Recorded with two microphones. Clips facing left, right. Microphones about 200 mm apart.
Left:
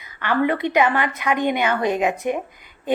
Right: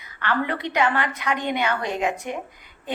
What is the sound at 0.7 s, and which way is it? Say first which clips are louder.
A woman's voice: left 4 dB; 15° left (ahead or behind).